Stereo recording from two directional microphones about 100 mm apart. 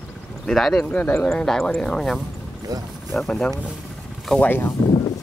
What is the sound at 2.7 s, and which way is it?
Speech, 40° right (ahead or behind).